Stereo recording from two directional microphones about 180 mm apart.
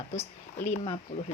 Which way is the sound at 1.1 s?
45° left (ahead or behind).